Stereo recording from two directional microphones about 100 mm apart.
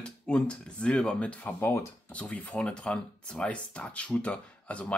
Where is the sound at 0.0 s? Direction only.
10° left (ahead or behind).